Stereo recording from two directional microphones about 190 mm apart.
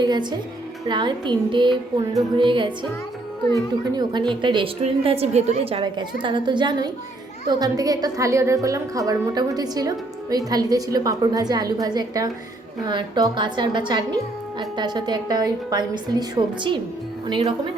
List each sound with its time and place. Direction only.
0.0 s a woman's voice: 25° right (ahead or behind)
3.9 s a woman's voice: 25° right (ahead or behind)